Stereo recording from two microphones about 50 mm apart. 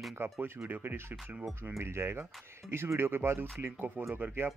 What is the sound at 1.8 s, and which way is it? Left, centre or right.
Speech, right.